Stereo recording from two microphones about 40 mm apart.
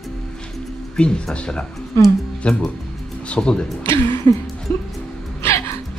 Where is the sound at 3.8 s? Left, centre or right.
Left.